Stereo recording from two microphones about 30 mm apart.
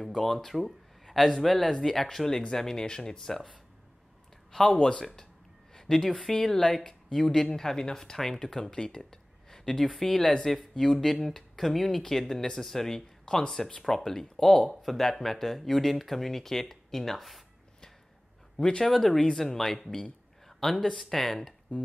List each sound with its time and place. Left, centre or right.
0.0 s speech: centre
5.8 s a woman's voice: centre
10.4 s speech: centre
14.7 s speech: centre
18.6 s speech: left
19.0 s speech: left
19.3 s a man's voice: centre